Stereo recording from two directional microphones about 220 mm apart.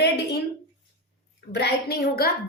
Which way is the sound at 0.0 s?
50° left (ahead or behind).